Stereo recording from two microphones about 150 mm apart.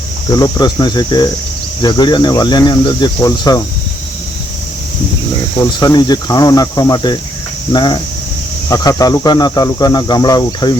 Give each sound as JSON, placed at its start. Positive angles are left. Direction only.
{"t": 0.3, "sound": "speech", "side_deg": 25}
{"t": 5.5, "sound": "speech", "side_deg": 25}